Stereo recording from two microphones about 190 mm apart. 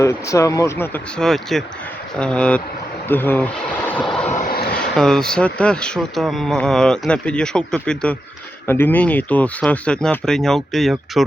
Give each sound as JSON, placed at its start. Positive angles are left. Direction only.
{"t": 0.0, "sound": "speech", "side_deg": 15}
{"t": 4.4, "sound": "vehicle", "side_deg": 50}
{"t": 4.7, "sound": "speech", "side_deg": 5}